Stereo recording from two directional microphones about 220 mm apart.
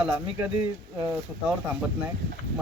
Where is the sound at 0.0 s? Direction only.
5° right (ahead or behind).